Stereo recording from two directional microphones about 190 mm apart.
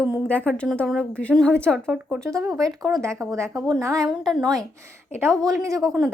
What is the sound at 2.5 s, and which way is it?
Speech, 20° right (ahead or behind).